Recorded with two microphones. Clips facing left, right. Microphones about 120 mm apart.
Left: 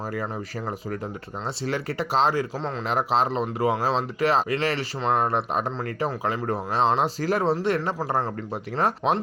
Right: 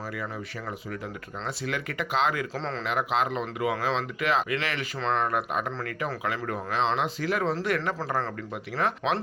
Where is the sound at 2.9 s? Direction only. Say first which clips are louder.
Left 4 dB; 35° left (ahead or behind).